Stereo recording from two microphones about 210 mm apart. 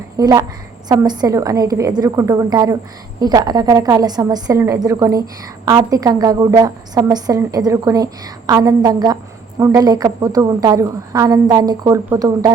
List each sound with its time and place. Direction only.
0.2 s a woman's voice: 15° right (ahead or behind)